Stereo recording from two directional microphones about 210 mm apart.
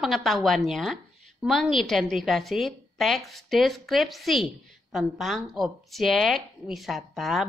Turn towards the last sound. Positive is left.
turn(degrees=0)  # may be behind; listen again after turning